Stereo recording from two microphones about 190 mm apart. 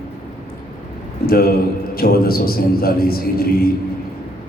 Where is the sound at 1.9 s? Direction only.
55° left (ahead or behind).